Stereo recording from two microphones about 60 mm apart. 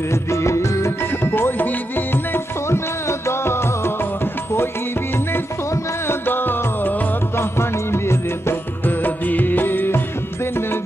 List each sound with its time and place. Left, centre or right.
0.1 s music of bollywood: left
1.2 s music: left
6.2 s music: left